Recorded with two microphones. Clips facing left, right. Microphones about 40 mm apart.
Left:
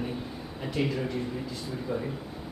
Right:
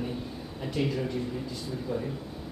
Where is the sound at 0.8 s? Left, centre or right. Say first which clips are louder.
Even; centre.